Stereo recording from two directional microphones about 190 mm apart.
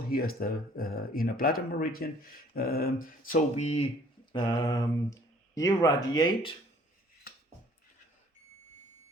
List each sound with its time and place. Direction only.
0.1 s speech: 50° left (ahead or behind)
4.3 s speech: 20° left (ahead or behind)